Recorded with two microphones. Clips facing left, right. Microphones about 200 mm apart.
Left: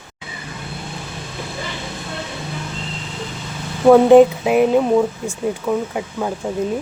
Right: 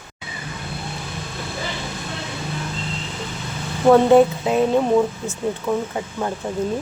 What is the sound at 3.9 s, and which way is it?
Speech, 15° left (ahead or behind).